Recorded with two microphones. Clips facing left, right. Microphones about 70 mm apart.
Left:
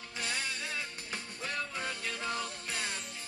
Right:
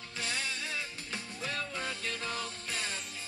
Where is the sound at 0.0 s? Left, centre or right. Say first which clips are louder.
Even; centre.